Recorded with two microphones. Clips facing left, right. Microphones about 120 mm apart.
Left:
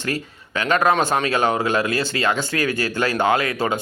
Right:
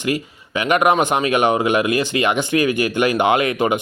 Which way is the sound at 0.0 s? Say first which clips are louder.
Right 4 dB; 15° right (ahead or behind).